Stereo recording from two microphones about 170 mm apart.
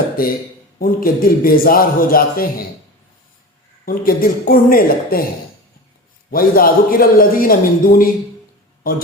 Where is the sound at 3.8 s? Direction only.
60° left (ahead or behind).